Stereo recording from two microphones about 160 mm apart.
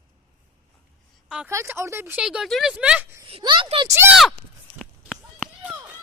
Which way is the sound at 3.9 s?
15° right (ahead or behind).